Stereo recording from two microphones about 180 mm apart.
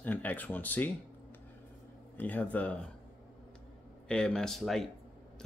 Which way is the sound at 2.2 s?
10° left (ahead or behind).